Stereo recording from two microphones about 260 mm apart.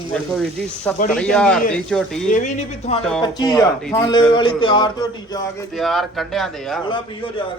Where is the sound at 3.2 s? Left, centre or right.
Centre.